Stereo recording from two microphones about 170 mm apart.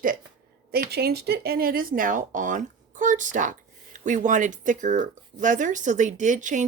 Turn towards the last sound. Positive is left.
turn(degrees=-45)  # may be behind; listen again after turning